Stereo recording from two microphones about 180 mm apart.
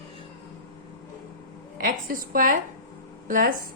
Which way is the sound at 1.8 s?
50° right (ahead or behind).